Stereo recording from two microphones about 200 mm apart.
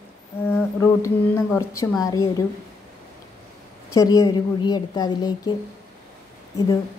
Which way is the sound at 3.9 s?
15° left (ahead or behind).